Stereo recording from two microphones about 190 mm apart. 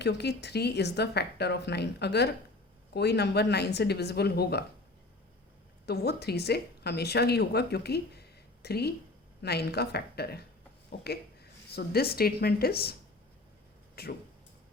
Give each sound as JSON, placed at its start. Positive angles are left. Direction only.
{"t": 0.0, "sound": "a woman's voice", "side_deg": 60}
{"t": 5.8, "sound": "a woman's voice", "side_deg": 55}
{"t": 11.7, "sound": "a woman's voice", "side_deg": 55}
{"t": 13.9, "sound": "speech", "side_deg": 55}